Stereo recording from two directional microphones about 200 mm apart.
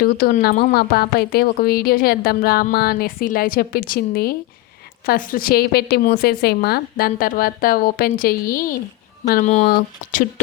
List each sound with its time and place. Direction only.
0.0 s a woman's voice: 50° left (ahead or behind)